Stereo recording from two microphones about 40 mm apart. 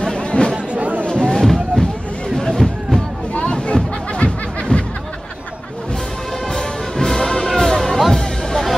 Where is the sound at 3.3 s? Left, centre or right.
Left.